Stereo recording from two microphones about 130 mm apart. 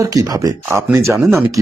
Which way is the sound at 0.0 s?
25° right (ahead or behind).